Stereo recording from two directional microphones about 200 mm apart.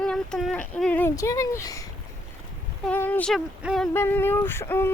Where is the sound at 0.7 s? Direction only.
5° left (ahead or behind).